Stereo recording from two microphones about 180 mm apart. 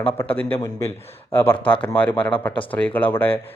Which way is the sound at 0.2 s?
10° left (ahead or behind).